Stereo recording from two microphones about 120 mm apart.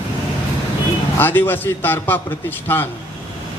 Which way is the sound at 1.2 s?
15° left (ahead or behind).